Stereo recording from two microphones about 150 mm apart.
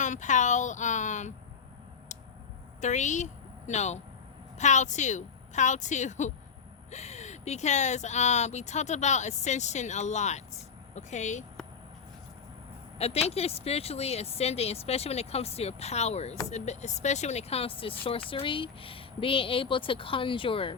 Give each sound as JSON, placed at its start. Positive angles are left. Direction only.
{"t": 0.0, "sound": "speech", "side_deg": 55}
{"t": 2.8, "sound": "speech", "side_deg": 50}
{"t": 13.0, "sound": "speech", "side_deg": 45}